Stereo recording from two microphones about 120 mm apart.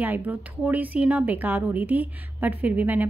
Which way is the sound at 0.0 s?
15° right (ahead or behind).